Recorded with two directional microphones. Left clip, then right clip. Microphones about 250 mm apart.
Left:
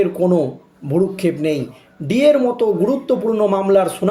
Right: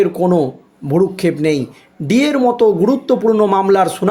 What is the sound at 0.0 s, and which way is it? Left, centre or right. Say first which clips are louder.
Speech: right 2 dB; right.